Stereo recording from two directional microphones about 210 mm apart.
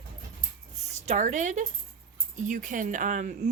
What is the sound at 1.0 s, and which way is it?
Speech, 35° right (ahead or behind).